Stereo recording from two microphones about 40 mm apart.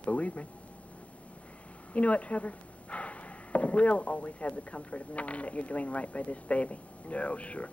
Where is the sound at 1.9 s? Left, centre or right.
Left.